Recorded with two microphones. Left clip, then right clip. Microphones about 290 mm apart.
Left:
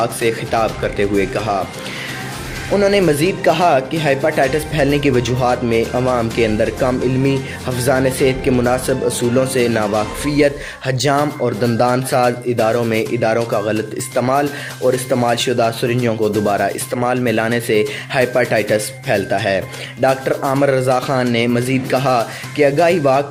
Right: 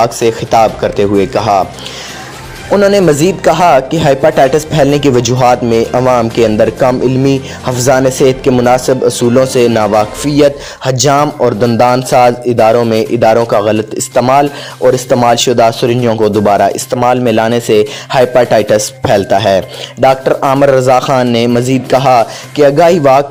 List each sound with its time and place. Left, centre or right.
0.0 s speech: centre
2.7 s speech: centre